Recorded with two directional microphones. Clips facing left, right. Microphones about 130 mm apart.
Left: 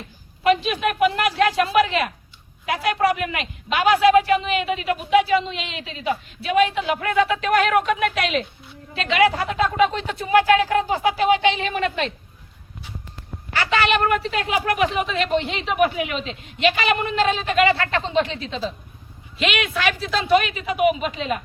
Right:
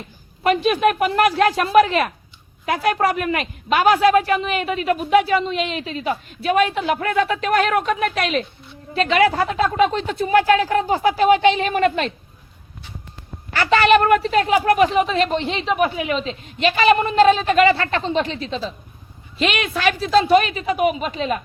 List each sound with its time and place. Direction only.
0.4 s a woman's voice: 45° right (ahead or behind)
13.5 s a woman's voice: 45° right (ahead or behind)